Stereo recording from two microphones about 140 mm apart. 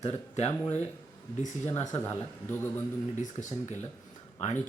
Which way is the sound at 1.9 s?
15° left (ahead or behind).